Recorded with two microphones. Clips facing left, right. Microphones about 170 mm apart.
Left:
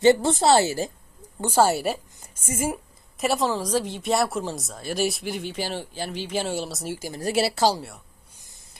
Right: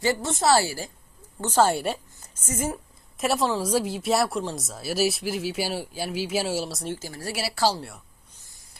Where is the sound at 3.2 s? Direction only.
Centre (ahead or behind); by 7.8 s 20° left (ahead or behind).